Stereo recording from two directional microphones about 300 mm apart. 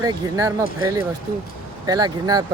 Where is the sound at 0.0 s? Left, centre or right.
Centre.